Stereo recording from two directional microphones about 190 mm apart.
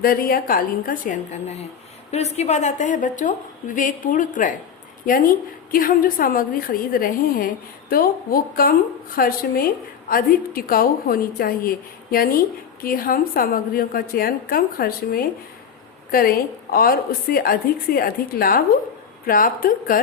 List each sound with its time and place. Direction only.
0.0 s a woman's voice: 50° left (ahead or behind)